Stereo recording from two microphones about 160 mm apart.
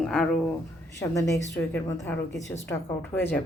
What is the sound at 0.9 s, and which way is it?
A woman's voice, 20° left (ahead or behind).